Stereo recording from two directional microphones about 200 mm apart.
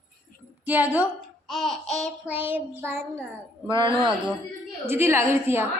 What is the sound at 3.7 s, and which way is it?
Speech, 25° right (ahead or behind).